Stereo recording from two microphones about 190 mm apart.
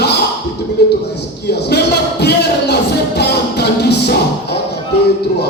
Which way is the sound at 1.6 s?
60° left (ahead or behind).